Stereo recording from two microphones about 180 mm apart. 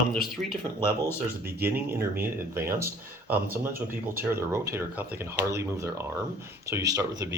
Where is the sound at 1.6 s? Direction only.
10° right (ahead or behind).